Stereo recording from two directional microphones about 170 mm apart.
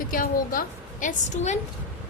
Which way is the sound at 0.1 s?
55° left (ahead or behind).